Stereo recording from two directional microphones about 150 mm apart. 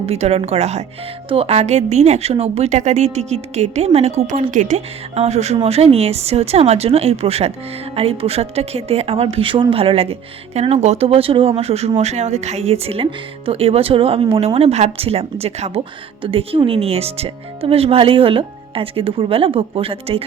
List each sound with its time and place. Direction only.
0.0 s speech: 45° right (ahead or behind)